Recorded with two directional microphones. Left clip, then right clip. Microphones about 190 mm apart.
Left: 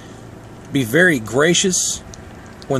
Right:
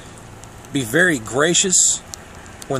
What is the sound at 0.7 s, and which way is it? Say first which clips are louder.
Speech: left 2 dB; 5° left (ahead or behind).